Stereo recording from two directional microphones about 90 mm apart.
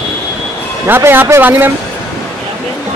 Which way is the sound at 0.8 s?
25° right (ahead or behind).